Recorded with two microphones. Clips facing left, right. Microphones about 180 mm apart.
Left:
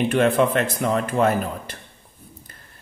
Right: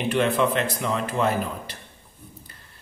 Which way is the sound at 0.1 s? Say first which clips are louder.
Left 1 dB; 50° left (ahead or behind).